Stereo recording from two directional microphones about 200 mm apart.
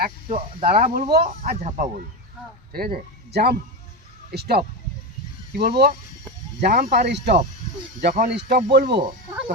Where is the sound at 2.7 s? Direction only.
50° right (ahead or behind).